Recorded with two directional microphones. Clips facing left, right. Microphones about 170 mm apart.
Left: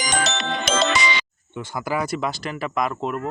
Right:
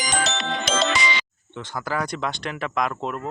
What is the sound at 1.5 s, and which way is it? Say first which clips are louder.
Speech: left 2 dB; 10° left (ahead or behind).